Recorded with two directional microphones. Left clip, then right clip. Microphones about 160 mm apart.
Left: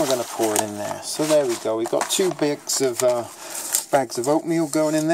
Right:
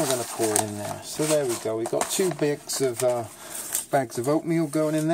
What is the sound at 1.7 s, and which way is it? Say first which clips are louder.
Speech: left 4 dB; 35° left (ahead or behind).